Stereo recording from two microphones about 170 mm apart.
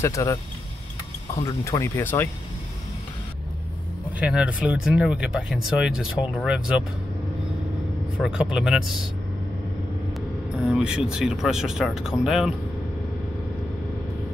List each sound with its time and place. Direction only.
0.0 s speech: 20° left (ahead or behind)
4.2 s speech: 5° right (ahead or behind)
8.2 s speech: 5° right (ahead or behind)
10.5 s speech: 5° right (ahead or behind)